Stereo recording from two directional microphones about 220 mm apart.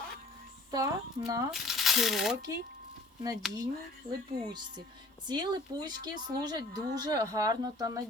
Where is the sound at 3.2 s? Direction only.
15° right (ahead or behind).